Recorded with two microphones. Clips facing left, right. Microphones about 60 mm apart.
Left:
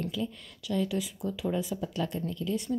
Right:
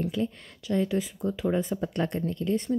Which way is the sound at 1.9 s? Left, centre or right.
Right.